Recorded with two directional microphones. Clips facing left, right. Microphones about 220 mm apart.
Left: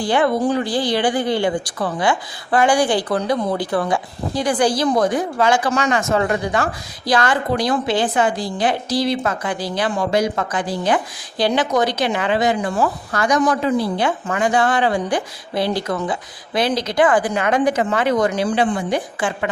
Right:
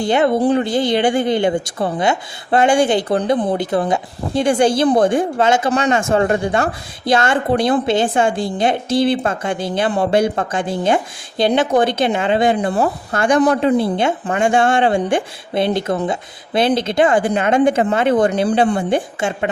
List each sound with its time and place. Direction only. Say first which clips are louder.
0.0 s a woman's voice: right 3 dB; 25° right (ahead or behind)